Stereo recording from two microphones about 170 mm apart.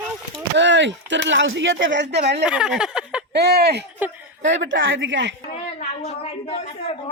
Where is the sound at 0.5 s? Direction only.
90° right.